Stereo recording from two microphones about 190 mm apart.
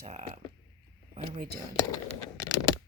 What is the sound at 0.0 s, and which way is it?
Speech, 35° right (ahead or behind).